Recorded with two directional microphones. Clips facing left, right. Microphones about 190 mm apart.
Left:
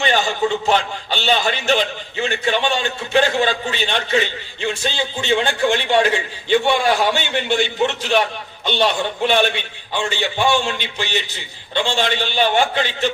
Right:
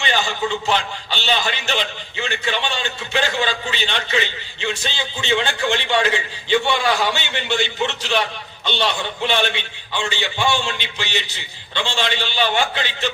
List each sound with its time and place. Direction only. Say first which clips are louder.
0.0 s a man's voice: left 4 dB; 45° left (ahead or behind)